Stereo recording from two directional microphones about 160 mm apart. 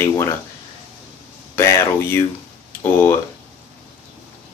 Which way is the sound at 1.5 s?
15° left (ahead or behind).